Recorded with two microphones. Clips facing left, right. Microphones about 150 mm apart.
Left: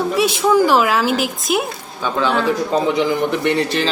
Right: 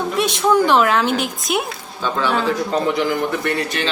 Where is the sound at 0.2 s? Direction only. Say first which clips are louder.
Left 1 dB; 5° left (ahead or behind).